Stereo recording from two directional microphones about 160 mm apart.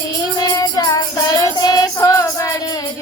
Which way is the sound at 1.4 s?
25° left (ahead or behind).